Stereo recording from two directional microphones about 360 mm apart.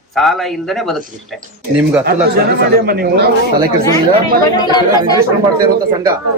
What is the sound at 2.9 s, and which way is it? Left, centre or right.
Speech, right.